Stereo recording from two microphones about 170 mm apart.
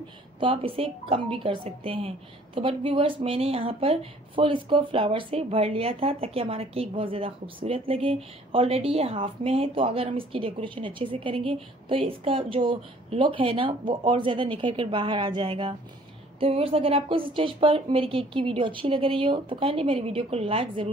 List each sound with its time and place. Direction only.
0.4 s a woman's voice: 30° right (ahead or behind)